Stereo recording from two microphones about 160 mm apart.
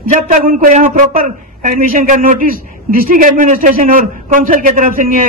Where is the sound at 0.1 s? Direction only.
50° right (ahead or behind).